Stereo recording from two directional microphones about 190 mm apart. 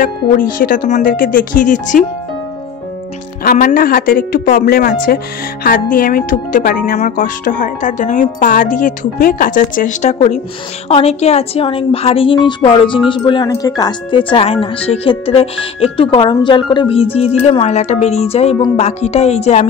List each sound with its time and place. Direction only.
0.6 s speech: 45° left (ahead or behind)
3.4 s a woman's voice: 45° left (ahead or behind)